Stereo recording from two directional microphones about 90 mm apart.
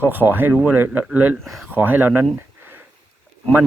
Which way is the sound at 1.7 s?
20° right (ahead or behind).